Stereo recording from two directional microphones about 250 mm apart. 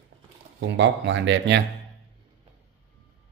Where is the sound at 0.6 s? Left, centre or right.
Right.